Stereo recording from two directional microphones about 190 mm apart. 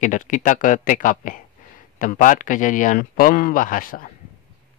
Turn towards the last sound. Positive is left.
turn(degrees=45)  # may be behind; listen again after turning